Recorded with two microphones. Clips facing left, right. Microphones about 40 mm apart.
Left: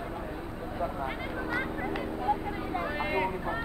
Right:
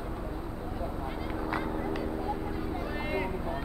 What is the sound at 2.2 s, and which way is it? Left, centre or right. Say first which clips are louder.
Vehicle: left 3 dB; left.